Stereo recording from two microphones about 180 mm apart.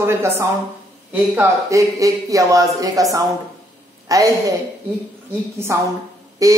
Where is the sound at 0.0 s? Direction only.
15° right (ahead or behind).